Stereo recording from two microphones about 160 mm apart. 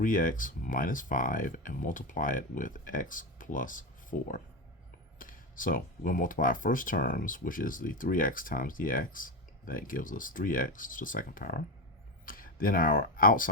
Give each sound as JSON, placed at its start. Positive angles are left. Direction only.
{"t": 0.0, "sound": "speech", "side_deg": 60}